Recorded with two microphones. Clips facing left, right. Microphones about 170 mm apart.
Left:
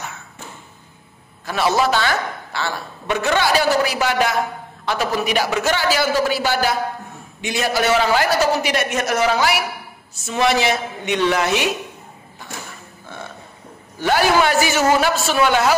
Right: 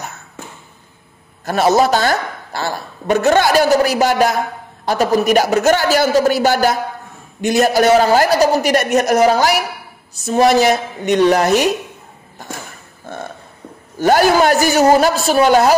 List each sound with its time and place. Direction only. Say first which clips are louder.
1.4 s a woman's voice: right 5 dB; 45° right (ahead or behind)
12.4 s a sound: right 4 dB; 45° right (ahead or behind)
13.9 s a man's voice: right 5 dB; 45° right (ahead or behind)